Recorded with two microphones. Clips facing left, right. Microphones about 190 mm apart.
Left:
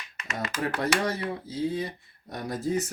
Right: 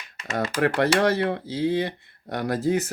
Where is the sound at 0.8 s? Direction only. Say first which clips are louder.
Right 7 dB; 80° right.